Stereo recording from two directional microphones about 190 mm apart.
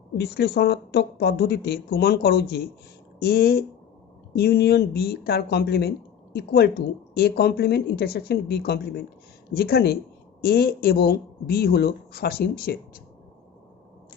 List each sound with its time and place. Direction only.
0.2 s speech: 60° left (ahead or behind)